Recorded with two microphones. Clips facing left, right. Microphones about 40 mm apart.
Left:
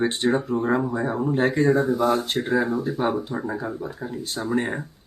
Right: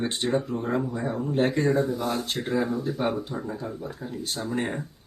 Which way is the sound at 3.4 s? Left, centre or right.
Centre.